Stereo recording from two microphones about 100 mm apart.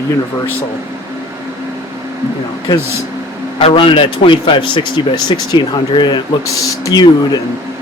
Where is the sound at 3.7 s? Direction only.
60° left (ahead or behind).